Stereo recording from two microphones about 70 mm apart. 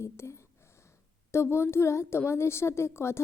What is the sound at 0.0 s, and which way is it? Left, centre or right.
A woman's voice, left.